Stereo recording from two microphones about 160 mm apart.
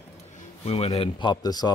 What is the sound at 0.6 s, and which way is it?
Speech, 40° left (ahead or behind).